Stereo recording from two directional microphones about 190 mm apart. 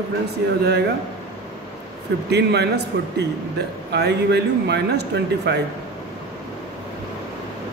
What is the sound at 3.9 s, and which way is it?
A man's voice, 60° right (ahead or behind).